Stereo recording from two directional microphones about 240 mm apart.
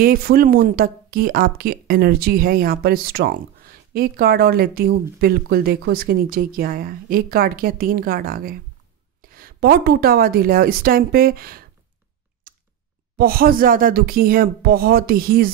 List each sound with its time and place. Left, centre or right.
0.0 s speech: right
12.5 s a sound: right
13.2 s speech: right